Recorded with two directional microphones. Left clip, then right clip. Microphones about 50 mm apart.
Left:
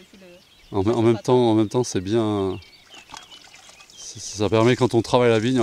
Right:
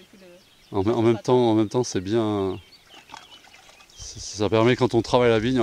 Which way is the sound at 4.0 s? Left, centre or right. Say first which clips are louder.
Left 1 dB; centre.